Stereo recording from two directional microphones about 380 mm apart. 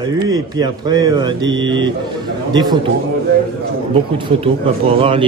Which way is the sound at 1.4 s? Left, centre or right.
Right.